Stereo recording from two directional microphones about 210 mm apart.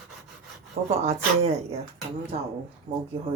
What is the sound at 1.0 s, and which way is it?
Speech, 30° right (ahead or behind).